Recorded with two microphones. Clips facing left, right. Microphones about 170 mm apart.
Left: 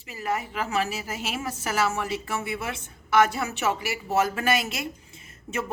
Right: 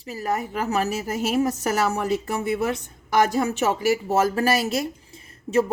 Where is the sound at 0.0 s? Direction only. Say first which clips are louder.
Right 3 dB; 40° right (ahead or behind).